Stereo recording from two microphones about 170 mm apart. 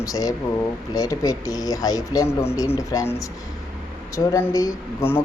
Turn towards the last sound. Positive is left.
turn(degrees=15)  # may be behind; listen again after turning